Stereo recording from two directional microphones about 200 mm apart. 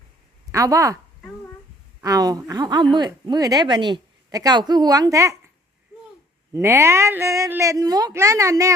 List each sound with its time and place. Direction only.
0.5 s speech: 15° right (ahead or behind)
2.0 s speech: 15° right (ahead or behind)
6.5 s speech: 15° right (ahead or behind)